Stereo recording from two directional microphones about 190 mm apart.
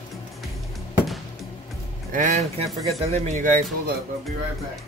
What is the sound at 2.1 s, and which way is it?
Speech, 40° right (ahead or behind).